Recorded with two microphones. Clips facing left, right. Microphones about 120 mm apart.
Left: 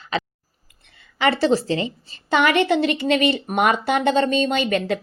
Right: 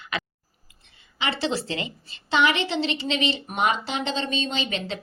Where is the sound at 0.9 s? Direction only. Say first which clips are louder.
Left 10 dB; 55° left (ahead or behind).